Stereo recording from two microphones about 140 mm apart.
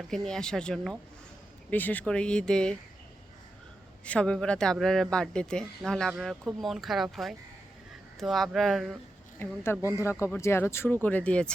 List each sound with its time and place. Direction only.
0.1 s speech: 5° left (ahead or behind)
4.0 s speech: 10° left (ahead or behind)
9.8 s speech: 20° left (ahead or behind)